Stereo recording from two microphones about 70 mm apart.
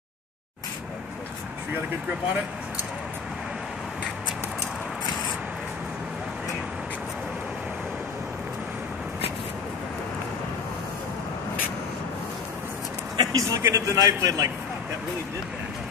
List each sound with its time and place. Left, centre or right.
13.2 s a sound: right
13.6 s speech: right
14.0 s a man's voice: right